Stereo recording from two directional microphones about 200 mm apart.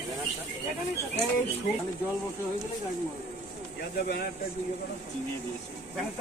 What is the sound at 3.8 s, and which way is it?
Speech, 50° left (ahead or behind).